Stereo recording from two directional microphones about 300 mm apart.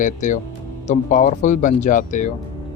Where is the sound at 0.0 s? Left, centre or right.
Left.